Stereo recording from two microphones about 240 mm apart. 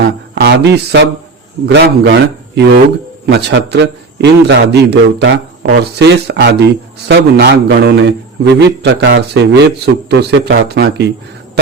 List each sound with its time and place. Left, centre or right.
0.3 s a man's voice: right